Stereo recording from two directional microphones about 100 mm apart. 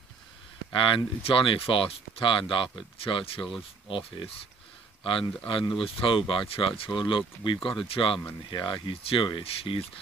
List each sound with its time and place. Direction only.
0.7 s speech: 55° left (ahead or behind)